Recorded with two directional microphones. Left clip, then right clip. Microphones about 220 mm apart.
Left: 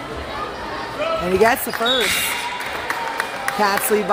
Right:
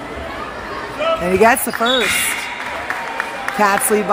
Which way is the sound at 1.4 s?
20° right (ahead or behind).